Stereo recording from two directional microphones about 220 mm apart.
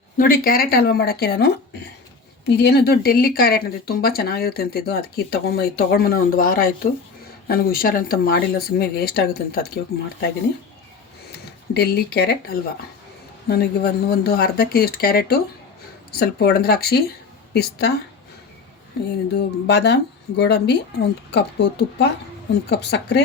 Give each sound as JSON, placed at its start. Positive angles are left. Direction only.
{"t": 0.2, "sound": "speech", "side_deg": 40}
{"t": 11.3, "sound": "speech", "side_deg": 45}
{"t": 19.4, "sound": "speech", "side_deg": 50}